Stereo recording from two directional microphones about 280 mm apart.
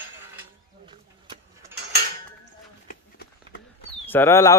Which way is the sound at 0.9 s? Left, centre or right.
Centre.